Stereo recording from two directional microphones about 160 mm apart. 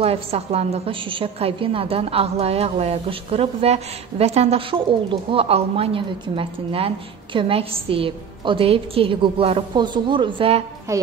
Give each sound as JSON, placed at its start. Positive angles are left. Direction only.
{"t": 0.0, "sound": "a woman's voice", "side_deg": -40}
{"t": 10.9, "sound": "music", "side_deg": -20}